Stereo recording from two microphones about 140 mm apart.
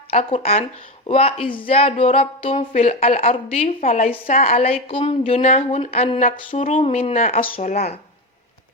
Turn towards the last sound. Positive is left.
turn(degrees=90)